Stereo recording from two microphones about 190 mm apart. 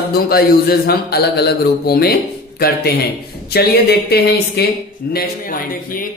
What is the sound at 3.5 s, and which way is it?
A man's voice, 55° left (ahead or behind).